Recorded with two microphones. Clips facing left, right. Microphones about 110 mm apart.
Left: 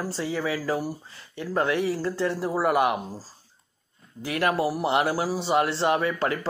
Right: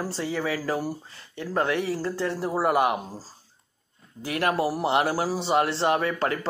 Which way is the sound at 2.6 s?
35° right (ahead or behind).